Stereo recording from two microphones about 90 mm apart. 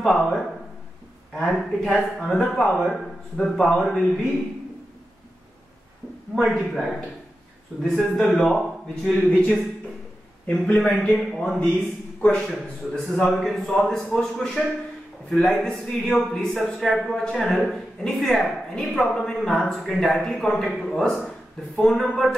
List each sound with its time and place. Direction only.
0.0 s a man's voice: 5° left (ahead or behind)
1.3 s a man's voice: 5° left (ahead or behind)
6.3 s a man's voice: centre (ahead or behind)
7.8 s a man's voice: 5° left (ahead or behind)
10.4 s a man's voice: 15° left (ahead or behind)